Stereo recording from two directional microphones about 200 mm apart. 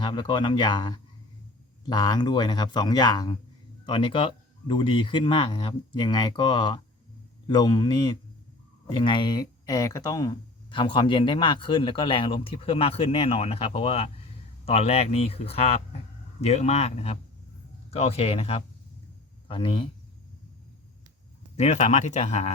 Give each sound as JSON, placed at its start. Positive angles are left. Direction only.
{"t": 0.0, "sound": "speech", "side_deg": 25}
{"t": 9.0, "sound": "a man's voice", "side_deg": 20}
{"t": 21.5, "sound": "a man's voice", "side_deg": 35}